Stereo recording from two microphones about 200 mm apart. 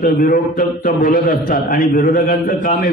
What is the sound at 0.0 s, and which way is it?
A man's voice, 45° left (ahead or behind).